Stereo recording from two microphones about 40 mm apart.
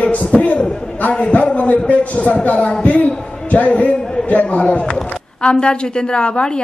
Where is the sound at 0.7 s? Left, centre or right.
Centre.